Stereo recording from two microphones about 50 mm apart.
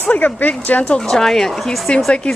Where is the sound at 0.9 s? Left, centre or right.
Centre.